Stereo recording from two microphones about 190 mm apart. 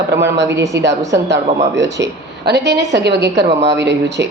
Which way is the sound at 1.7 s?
70° right (ahead or behind).